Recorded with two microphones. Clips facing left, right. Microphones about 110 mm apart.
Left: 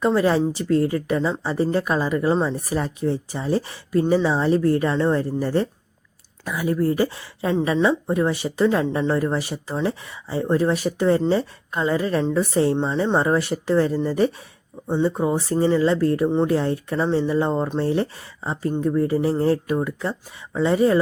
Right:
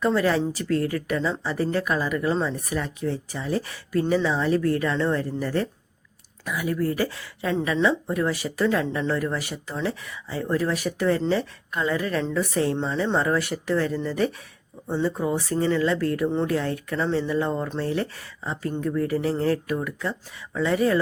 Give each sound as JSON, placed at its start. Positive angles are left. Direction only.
{"t": 0.0, "sound": "speech", "side_deg": 25}